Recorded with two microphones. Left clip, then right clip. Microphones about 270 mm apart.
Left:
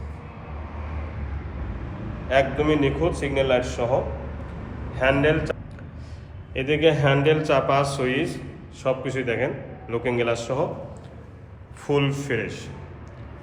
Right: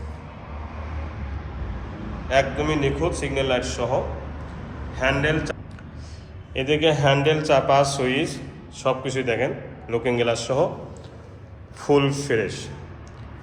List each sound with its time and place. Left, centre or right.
2.3 s a man's voice: centre
11.8 s a man's voice: centre